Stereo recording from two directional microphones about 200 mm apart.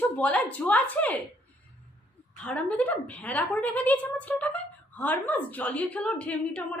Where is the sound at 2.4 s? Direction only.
5° left (ahead or behind).